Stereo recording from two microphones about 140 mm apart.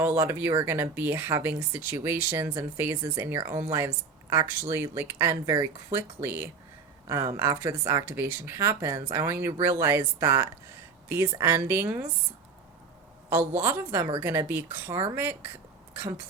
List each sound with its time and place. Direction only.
0.0 s speech: 15° right (ahead or behind)
13.3 s speech: 20° right (ahead or behind)